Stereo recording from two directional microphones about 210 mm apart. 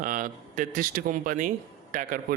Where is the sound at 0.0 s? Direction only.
40° right (ahead or behind).